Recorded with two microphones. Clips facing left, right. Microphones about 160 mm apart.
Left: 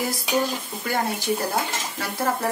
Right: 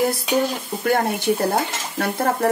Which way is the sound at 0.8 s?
55° right (ahead or behind).